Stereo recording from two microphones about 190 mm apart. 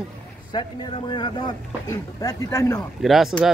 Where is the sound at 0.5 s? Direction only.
25° left (ahead or behind).